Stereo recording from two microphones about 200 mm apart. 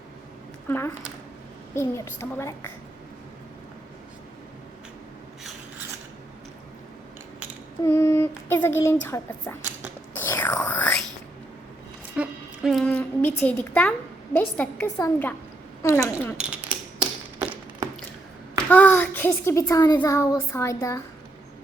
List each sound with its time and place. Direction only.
0.7 s a child's voice: 15° left (ahead or behind)
7.9 s a child's voice: 15° left (ahead or behind)
10.2 s whispering: 10° left (ahead or behind)
12.1 s a sound: 5° right (ahead or behind)
14.3 s a child's voice: 5° left (ahead or behind)
16.6 s typewriter: 5° right (ahead or behind)
18.7 s a child's voice: 10° left (ahead or behind)